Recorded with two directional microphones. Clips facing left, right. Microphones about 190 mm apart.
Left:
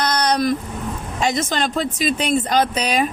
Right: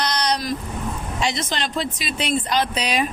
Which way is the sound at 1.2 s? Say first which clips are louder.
Left 5 dB; 45° left (ahead or behind).